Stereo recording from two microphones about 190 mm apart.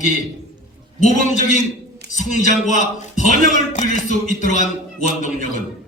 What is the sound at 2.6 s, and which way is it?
Speech, 40° left (ahead or behind).